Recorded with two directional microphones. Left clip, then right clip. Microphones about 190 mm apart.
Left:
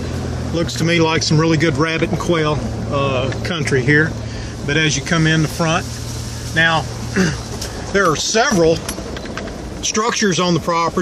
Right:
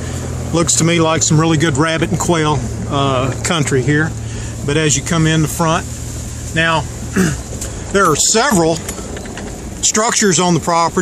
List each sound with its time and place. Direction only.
0.6 s speech: 40° right (ahead or behind); by 3.6 s 55° right (ahead or behind)
3.7 s speech: 25° right (ahead or behind)
9.9 s speech: 45° right (ahead or behind)